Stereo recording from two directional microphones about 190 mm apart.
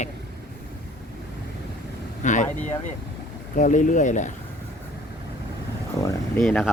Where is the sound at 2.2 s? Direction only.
40° left (ahead or behind).